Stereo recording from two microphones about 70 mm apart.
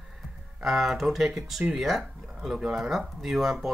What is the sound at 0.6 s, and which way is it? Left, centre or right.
Speech, centre.